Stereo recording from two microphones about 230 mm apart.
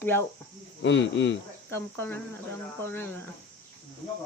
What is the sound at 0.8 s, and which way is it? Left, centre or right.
Speech, left.